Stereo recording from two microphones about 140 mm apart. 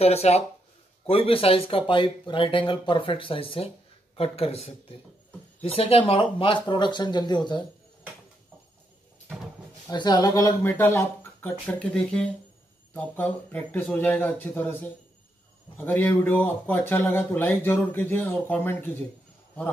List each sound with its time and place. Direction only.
0.0 s speech: 50° left (ahead or behind); by 7.6 s 30° left (ahead or behind)
9.8 s speech: 30° left (ahead or behind)